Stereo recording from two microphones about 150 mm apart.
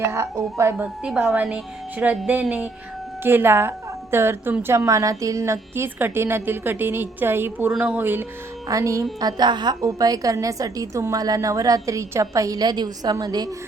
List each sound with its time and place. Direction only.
0.0 s a woman's voice: 20° right (ahead or behind)